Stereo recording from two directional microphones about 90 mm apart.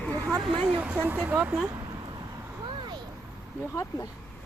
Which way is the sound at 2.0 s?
55° right (ahead or behind).